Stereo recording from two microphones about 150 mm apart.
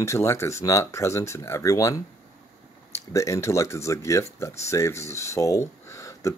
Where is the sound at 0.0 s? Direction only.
20° left (ahead or behind).